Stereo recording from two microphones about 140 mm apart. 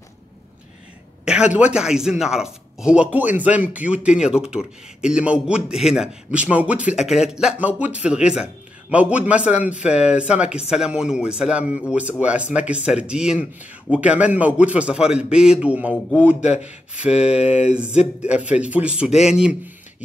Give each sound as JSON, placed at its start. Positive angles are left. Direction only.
{"t": 1.2, "sound": "speech", "side_deg": -5}
{"t": 16.3, "sound": "speech", "side_deg": 55}
{"t": 18.4, "sound": "speech", "side_deg": -10}